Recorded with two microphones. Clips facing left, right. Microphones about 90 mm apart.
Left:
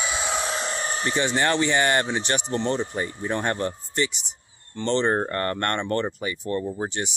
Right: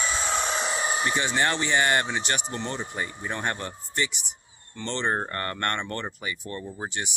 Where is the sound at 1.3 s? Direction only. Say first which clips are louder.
Left 4 dB; 40° left (ahead or behind).